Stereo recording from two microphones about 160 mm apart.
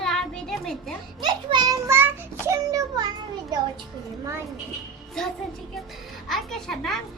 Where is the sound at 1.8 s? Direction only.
15° right (ahead or behind).